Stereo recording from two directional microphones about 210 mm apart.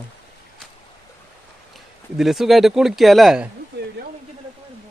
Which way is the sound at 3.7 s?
55° right (ahead or behind).